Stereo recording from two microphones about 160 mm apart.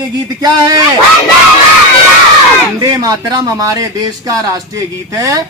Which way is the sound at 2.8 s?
25° right (ahead or behind).